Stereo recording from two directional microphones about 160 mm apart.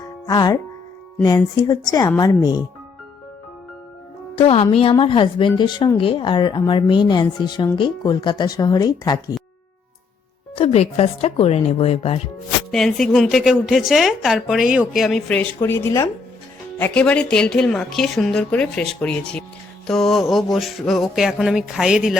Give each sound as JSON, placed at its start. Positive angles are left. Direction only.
{"t": 0.3, "sound": "a woman's voice", "side_deg": 25}
{"t": 4.4, "sound": "a woman's voice", "side_deg": 40}
{"t": 10.5, "sound": "speech", "side_deg": 40}
{"t": 12.7, "sound": "a woman's voice", "side_deg": 0}